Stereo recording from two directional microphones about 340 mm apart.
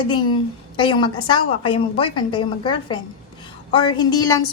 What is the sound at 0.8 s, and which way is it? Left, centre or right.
A woman's voice, centre.